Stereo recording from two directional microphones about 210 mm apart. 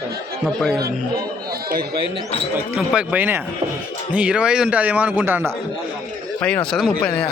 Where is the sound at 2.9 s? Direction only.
5° right (ahead or behind).